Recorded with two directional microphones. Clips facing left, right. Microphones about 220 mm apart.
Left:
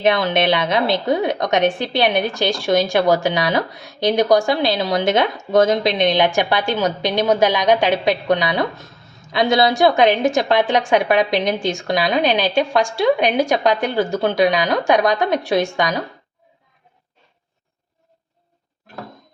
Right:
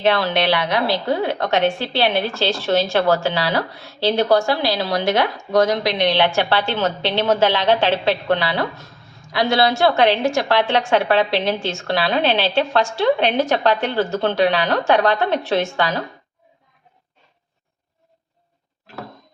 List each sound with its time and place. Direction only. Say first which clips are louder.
0.0 s a woman's voice: left 1 dB; 20° left (ahead or behind)